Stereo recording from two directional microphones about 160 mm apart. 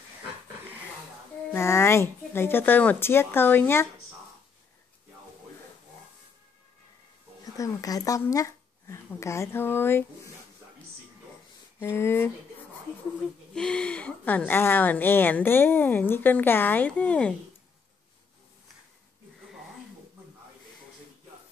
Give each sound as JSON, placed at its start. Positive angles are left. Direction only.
{"t": 1.5, "sound": "speech", "side_deg": 15}
{"t": 7.5, "sound": "speech", "side_deg": 20}
{"t": 11.8, "sound": "speech", "side_deg": 15}
{"t": 13.6, "sound": "speech", "side_deg": 5}